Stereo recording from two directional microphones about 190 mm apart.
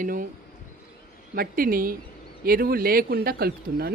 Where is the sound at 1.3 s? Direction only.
50° right (ahead or behind).